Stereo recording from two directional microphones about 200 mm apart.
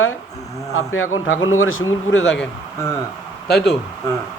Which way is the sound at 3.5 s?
55° left (ahead or behind).